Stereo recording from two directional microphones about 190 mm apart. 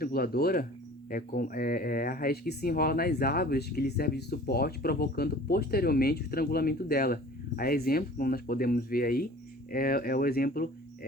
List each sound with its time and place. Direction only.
0.0 s speech: 50° left (ahead or behind)